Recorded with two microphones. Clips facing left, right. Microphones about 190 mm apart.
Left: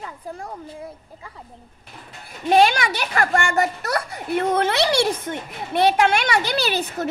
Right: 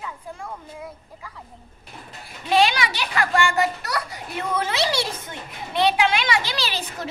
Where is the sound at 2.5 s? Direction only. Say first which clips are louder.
Left 3 dB; 50° left (ahead or behind).